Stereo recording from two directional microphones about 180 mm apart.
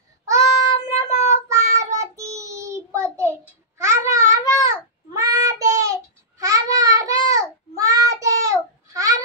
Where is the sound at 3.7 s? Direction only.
15° right (ahead or behind).